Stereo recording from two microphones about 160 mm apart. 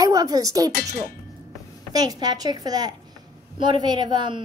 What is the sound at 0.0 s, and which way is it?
Speech, 20° right (ahead or behind).